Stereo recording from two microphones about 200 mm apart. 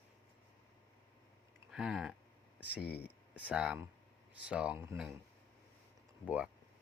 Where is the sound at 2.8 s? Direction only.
55° left (ahead or behind).